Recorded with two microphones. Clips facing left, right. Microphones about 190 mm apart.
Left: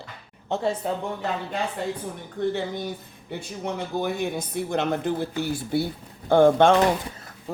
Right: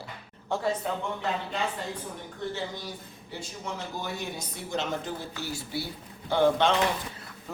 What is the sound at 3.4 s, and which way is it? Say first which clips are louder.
Speech: left 6 dB; 60° left (ahead or behind).